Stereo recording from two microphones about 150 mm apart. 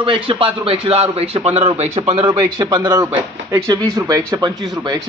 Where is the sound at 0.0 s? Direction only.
35° right (ahead or behind).